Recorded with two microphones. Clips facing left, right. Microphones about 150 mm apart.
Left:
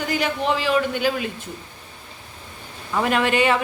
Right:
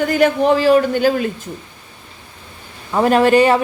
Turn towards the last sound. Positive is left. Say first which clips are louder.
# right 8 dB
turn(degrees=-40)  # may be behind; listen again after turning